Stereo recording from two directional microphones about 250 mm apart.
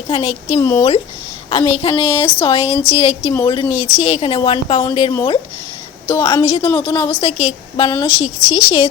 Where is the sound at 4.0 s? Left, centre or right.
Centre.